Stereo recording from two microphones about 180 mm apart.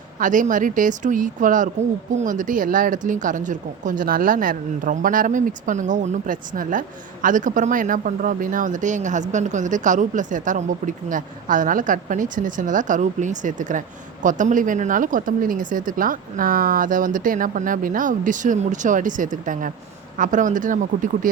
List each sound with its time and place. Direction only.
0.2 s speech: 45° right (ahead or behind)